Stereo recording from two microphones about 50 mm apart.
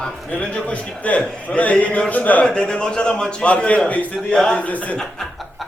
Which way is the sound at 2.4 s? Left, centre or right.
Centre.